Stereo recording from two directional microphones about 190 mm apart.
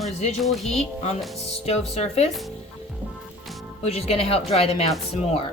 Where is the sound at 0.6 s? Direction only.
35° left (ahead or behind).